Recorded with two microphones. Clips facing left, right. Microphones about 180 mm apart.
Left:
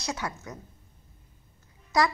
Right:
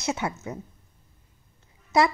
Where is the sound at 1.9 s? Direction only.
25° right (ahead or behind).